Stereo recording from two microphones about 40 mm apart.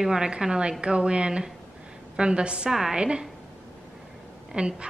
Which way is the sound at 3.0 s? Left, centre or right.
Right.